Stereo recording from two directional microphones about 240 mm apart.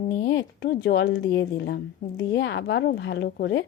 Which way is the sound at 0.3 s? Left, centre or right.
Left.